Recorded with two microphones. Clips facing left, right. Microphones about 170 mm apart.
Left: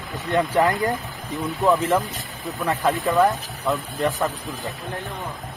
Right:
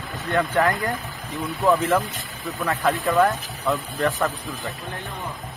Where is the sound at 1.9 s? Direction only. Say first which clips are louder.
Even; 20° left (ahead or behind).